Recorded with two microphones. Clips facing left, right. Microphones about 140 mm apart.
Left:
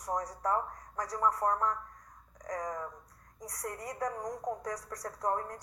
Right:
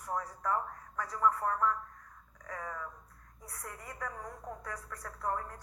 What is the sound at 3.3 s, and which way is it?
Speech, 80° left.